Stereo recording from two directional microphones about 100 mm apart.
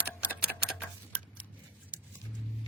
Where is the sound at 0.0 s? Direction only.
15° right (ahead or behind).